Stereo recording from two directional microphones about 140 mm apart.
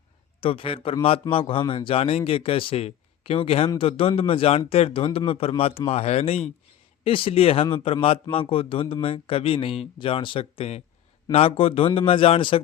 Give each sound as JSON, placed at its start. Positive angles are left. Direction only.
{"t": 0.4, "sound": "speech", "side_deg": 40}